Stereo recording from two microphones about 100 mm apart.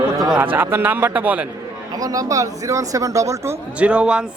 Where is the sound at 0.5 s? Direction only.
20° right (ahead or behind).